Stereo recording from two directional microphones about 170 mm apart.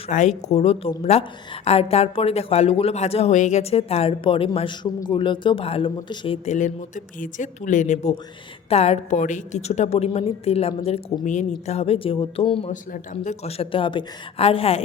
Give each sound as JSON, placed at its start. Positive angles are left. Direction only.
{"t": 0.1, "sound": "speech", "side_deg": 45}
{"t": 12.7, "sound": "speech", "side_deg": 45}